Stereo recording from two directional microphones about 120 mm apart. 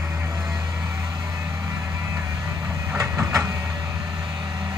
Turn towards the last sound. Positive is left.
turn(degrees=-20)  # may be behind; listen again after turning